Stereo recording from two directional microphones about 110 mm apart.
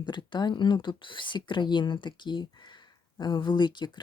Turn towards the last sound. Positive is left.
turn(degrees=45)  # may be behind; listen again after turning